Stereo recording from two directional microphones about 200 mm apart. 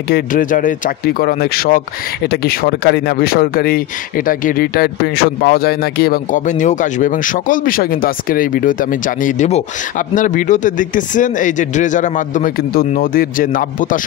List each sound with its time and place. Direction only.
0.1 s speech: 40° left (ahead or behind)